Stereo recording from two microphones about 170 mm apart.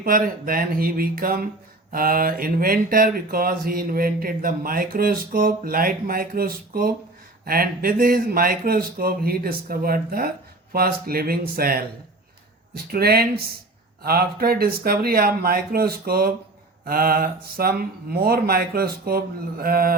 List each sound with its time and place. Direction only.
0.0 s speech: 60° right (ahead or behind)